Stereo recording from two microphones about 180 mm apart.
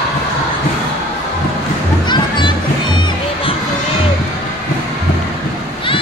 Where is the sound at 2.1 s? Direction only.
25° left (ahead or behind).